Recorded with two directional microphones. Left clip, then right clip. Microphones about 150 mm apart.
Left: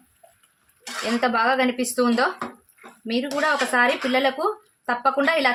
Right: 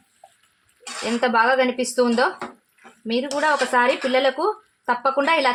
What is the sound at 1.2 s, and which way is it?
Speech, 25° right (ahead or behind).